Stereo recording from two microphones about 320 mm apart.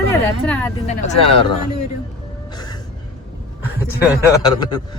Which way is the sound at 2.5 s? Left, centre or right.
Centre.